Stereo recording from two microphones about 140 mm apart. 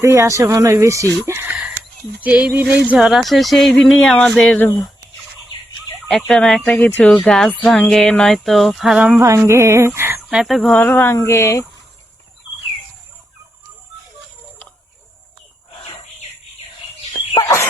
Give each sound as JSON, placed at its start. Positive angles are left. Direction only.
{"t": 0.0, "sound": "speech", "side_deg": -20}
{"t": 2.2, "sound": "a sound", "side_deg": -10}
{"t": 2.9, "sound": "speech", "side_deg": -5}
{"t": 6.1, "sound": "speech", "side_deg": 0}
{"t": 9.1, "sound": "speech", "side_deg": -20}
{"t": 10.2, "sound": "speech", "side_deg": 0}
{"t": 10.8, "sound": "speech", "side_deg": 15}
{"t": 17.4, "sound": "chicken", "side_deg": 20}